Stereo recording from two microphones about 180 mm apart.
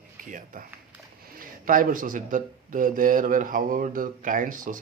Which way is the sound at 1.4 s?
50° right (ahead or behind).